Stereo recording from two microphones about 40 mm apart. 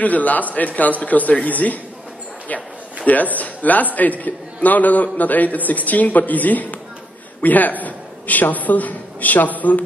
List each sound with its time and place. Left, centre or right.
0.0 s a man's voice: left
3.1 s a man's voice: left